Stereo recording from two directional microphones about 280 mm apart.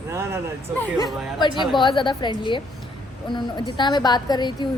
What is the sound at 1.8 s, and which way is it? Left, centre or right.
A woman's voice, centre.